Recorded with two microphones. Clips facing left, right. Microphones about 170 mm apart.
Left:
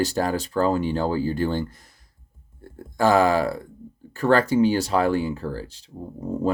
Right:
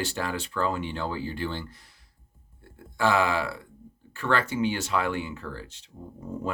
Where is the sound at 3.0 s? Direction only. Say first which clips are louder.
Left 6 dB; 40° left (ahead or behind).